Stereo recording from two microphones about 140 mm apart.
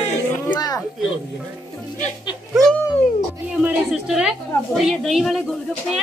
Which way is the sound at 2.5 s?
Centre (ahead or behind).